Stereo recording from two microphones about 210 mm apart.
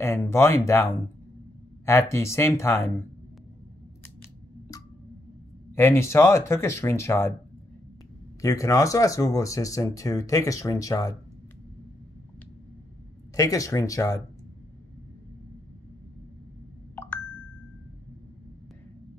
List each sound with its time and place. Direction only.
0.0 s speech: 10° left (ahead or behind)
5.8 s speech: 10° left (ahead or behind)
8.4 s speech: 15° left (ahead or behind)
13.4 s speech: 15° left (ahead or behind)
16.9 s ding: 10° left (ahead or behind)